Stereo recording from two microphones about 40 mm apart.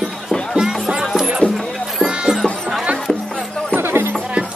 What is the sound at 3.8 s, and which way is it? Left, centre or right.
Music, right.